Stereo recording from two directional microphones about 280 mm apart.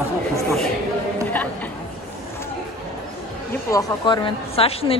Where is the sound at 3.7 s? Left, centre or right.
Centre.